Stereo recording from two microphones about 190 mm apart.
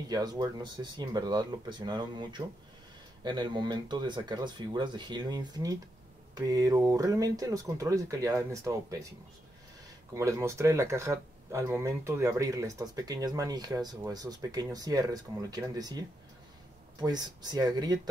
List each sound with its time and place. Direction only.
0.1 s speech: 20° right (ahead or behind)
10.1 s speech: 15° right (ahead or behind)